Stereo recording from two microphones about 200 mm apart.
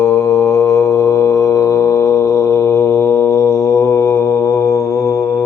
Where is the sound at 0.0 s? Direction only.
15° left (ahead or behind).